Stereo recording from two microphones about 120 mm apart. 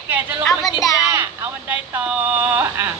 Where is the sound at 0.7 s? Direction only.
30° left (ahead or behind).